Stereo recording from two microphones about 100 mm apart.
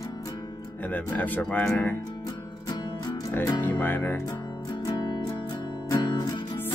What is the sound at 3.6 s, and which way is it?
Speech, 20° left (ahead or behind).